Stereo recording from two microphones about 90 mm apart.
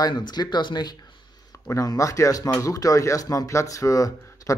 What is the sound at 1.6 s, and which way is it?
Speech, 40° left (ahead or behind).